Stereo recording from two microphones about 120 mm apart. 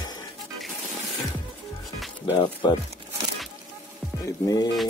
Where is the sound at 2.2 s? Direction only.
40° left (ahead or behind).